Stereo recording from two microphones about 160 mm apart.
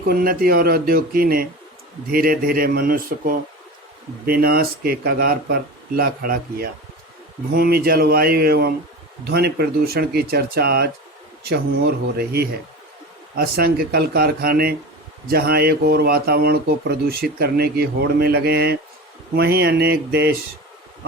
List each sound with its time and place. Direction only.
0.1 s speech: 65° right (ahead or behind)
12.1 s speech: 75° right (ahead or behind); by 20.3 s 90° right